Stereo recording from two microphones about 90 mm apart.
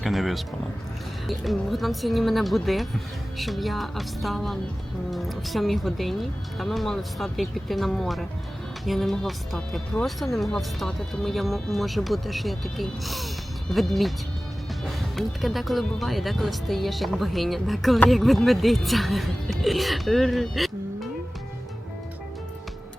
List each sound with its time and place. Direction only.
0.0 s speech: centre (ahead or behind)